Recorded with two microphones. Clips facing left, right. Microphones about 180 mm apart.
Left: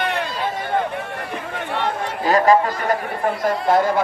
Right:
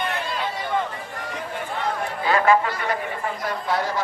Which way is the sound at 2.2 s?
40° left (ahead or behind).